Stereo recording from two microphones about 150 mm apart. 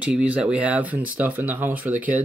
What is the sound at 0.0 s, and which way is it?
Speech, 10° right (ahead or behind).